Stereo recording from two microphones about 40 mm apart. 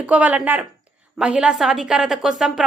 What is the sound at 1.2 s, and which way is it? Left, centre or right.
Speech, right.